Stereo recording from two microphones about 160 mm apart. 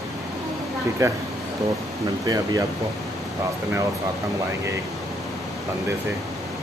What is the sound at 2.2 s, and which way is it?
Speech, 20° right (ahead or behind).